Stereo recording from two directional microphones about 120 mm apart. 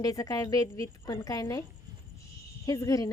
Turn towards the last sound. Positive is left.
turn(degrees=30)  # may be behind; listen again after turning